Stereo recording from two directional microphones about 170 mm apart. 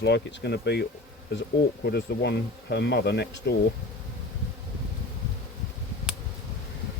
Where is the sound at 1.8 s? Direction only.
75° left (ahead or behind).